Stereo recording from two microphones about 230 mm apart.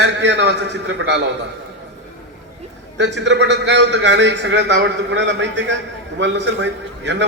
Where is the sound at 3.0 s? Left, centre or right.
Right.